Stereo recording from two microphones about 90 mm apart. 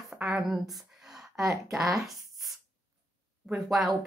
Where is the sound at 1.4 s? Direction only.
35° right (ahead or behind).